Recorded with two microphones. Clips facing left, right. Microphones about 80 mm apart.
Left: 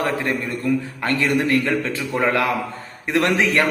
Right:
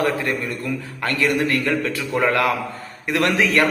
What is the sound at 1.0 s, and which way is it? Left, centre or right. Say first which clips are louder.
A man's voice: right 1 dB; left.